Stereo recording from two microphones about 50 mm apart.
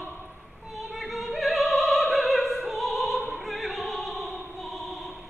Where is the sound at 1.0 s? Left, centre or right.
Centre.